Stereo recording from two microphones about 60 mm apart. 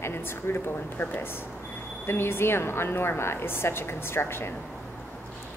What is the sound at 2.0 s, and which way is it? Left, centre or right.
A woman's voice, left.